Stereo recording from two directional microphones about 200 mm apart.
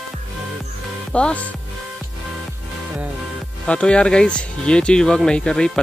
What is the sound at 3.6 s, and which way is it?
Speech, 5° left (ahead or behind).